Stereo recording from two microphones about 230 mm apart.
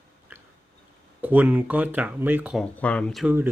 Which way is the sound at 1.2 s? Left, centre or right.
Centre.